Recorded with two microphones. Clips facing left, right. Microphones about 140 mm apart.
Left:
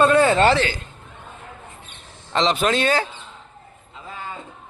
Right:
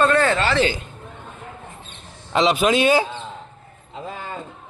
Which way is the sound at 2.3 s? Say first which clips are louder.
Right 2 dB; 5° right (ahead or behind).